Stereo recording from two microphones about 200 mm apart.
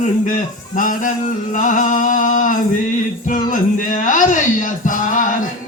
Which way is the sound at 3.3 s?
40° left (ahead or behind).